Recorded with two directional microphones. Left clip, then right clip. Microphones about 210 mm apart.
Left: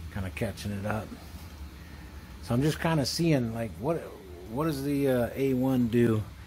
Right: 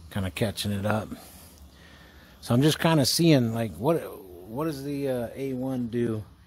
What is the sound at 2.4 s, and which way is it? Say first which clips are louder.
Speech: right 5 dB; 55° right (ahead or behind).